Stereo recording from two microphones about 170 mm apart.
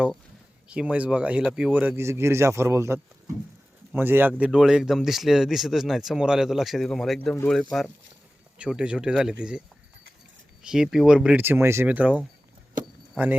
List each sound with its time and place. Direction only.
0.7 s speech: 5° right (ahead or behind)